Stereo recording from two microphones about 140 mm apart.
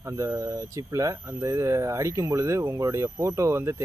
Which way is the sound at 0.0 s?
20° right (ahead or behind).